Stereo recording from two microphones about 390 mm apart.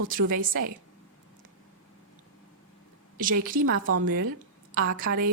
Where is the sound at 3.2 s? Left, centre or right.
Right.